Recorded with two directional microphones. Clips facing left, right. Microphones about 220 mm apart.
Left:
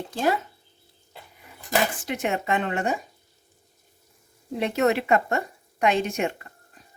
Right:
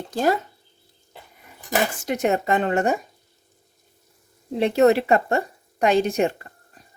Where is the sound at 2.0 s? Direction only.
40° right (ahead or behind).